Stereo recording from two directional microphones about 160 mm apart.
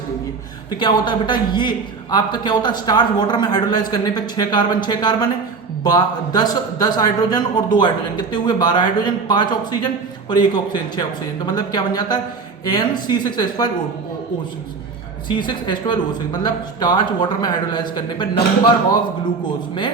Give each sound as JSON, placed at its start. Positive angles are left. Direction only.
{"t": 0.8, "sound": "a man's voice", "side_deg": 30}
{"t": 15.3, "sound": "a man's voice", "side_deg": 30}